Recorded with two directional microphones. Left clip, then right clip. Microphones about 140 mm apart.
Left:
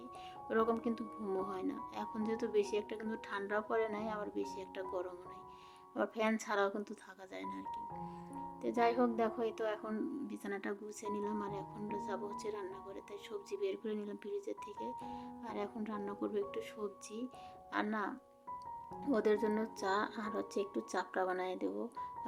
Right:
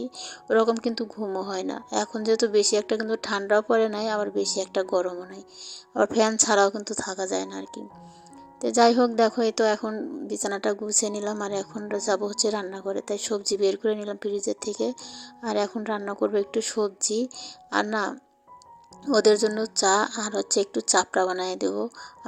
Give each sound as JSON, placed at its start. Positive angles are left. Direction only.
{"t": 0.0, "sound": "a woman's voice", "side_deg": -40}
{"t": 19.1, "sound": "a woman's voice", "side_deg": -40}